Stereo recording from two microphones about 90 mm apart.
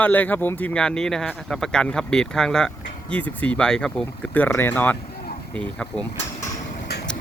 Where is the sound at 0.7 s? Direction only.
10° left (ahead or behind).